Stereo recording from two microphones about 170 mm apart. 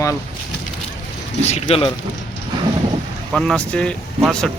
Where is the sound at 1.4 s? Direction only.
40° left (ahead or behind).